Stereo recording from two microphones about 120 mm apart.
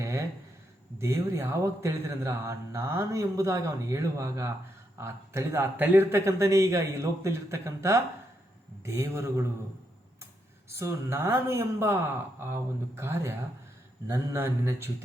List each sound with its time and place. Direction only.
0.0 s a sound: 25° right (ahead or behind)
0.9 s speech: 25° right (ahead or behind)
10.8 s speech: 20° right (ahead or behind)